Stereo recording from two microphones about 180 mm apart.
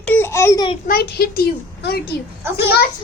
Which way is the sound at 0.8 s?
55° left (ahead or behind).